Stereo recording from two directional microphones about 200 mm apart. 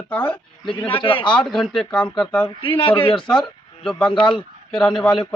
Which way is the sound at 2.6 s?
25° left (ahead or behind).